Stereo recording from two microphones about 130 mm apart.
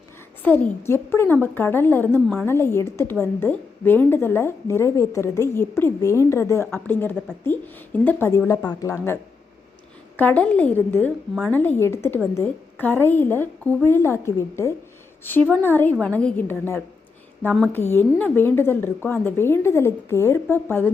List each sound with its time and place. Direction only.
0.4 s a woman's voice: 15° left (ahead or behind)
10.2 s a woman's voice: 10° left (ahead or behind)
17.9 s a woman's voice: 15° left (ahead or behind)